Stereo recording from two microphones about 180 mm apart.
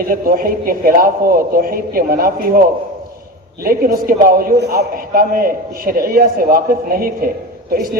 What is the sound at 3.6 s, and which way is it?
A man's voice, 55° right (ahead or behind).